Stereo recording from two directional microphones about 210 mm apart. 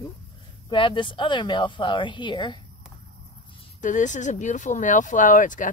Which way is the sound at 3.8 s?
35° left (ahead or behind).